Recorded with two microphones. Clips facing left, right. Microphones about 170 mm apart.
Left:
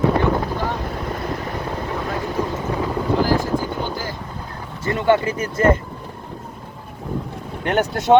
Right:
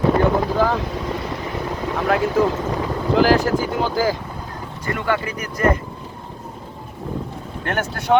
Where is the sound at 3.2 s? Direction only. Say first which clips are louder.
Right 6 dB; 85° right.